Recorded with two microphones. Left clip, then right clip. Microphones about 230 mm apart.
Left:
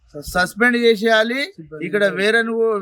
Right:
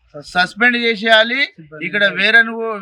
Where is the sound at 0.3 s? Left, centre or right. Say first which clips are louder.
Right 3 dB; centre.